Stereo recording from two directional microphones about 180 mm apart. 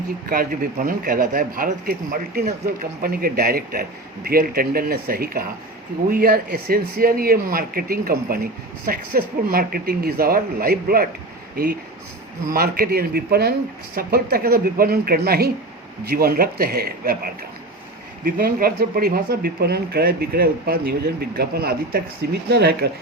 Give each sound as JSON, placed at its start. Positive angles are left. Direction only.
{"t": 0.3, "sound": "speech", "side_deg": -50}
{"t": 12.5, "sound": "speech", "side_deg": -55}